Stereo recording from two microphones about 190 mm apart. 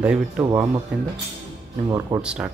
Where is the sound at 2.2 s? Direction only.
5° right (ahead or behind).